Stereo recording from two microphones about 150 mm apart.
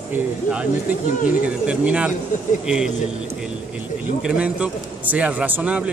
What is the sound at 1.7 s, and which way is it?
Speech, 10° right (ahead or behind).